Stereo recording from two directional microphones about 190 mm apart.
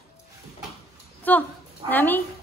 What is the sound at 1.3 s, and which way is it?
Dog, 10° left (ahead or behind).